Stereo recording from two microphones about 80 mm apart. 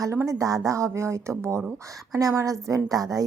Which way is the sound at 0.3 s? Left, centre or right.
Right.